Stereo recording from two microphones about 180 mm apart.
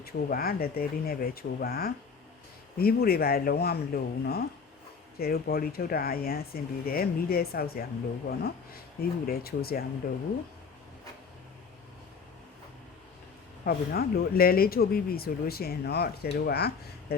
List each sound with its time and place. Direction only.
0.0 s speech: 55° left (ahead or behind)
13.7 s speech: 55° left (ahead or behind)